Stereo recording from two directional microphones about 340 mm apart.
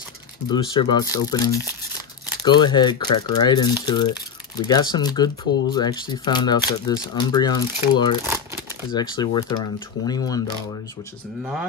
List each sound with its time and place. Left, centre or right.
0.5 s speech: centre